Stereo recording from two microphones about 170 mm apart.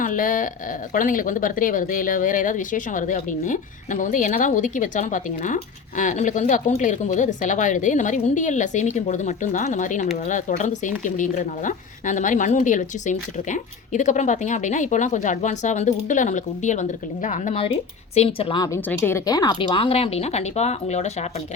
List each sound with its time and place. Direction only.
0.0 s speech: 50° left (ahead or behind)
18.1 s speech: 35° left (ahead or behind)